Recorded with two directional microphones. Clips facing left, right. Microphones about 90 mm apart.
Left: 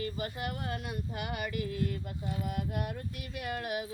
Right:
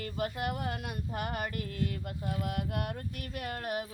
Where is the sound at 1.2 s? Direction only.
45° right (ahead or behind).